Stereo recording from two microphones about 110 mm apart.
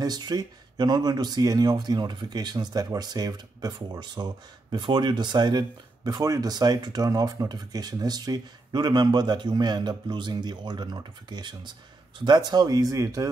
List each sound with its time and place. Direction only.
0.0 s speech: 40° right (ahead or behind)